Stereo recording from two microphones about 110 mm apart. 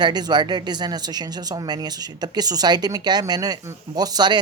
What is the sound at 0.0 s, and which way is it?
Speech, 40° right (ahead or behind).